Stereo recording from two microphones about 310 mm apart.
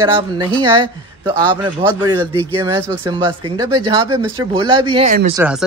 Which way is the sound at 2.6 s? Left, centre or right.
Centre.